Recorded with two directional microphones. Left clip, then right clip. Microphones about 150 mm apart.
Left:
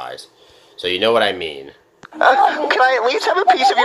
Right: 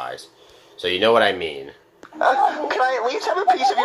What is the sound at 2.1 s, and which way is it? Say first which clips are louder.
Speech: left 5 dB; 15° left (ahead or behind).